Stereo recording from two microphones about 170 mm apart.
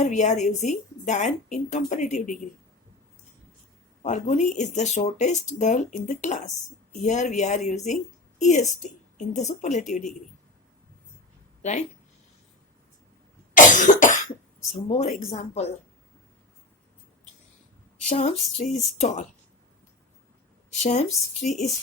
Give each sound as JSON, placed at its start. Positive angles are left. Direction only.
{"t": 0.0, "sound": "speech", "side_deg": 45}
{"t": 4.0, "sound": "a woman's voice", "side_deg": 45}
{"t": 11.6, "sound": "speech", "side_deg": 45}
{"t": 13.5, "sound": "cough", "side_deg": 50}
{"t": 18.1, "sound": "speech", "side_deg": 45}
{"t": 20.7, "sound": "speech", "side_deg": 45}